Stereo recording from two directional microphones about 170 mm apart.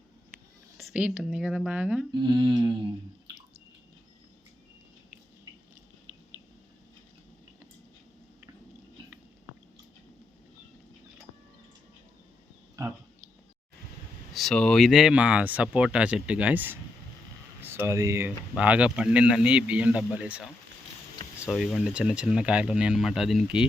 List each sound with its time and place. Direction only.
0.8 s speech: 10° right (ahead or behind)
2.1 s humming: 25° right (ahead or behind)
14.3 s speech: 5° left (ahead or behind)
21.5 s speech: centre (ahead or behind)